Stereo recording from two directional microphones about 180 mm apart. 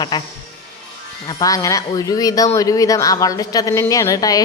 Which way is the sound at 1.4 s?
20° left (ahead or behind).